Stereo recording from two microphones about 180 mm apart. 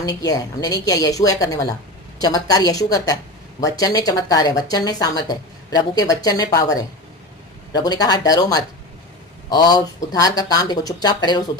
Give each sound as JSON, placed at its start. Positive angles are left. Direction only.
{"t": 0.0, "sound": "speech", "side_deg": 20}